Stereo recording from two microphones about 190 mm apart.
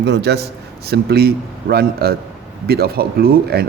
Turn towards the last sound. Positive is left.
turn(degrees=-55)  # may be behind; listen again after turning